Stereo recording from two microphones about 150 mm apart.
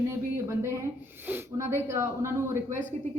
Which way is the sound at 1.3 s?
15° right (ahead or behind).